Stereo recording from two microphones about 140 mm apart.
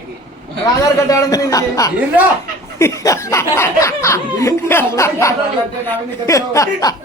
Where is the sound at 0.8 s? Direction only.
25° left (ahead or behind).